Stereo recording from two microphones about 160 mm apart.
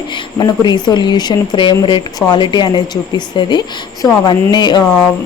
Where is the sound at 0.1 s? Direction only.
30° left (ahead or behind).